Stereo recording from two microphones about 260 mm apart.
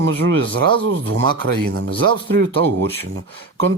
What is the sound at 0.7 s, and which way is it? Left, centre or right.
Speech, right.